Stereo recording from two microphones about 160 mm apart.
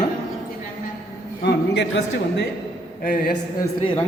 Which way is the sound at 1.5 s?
90° left.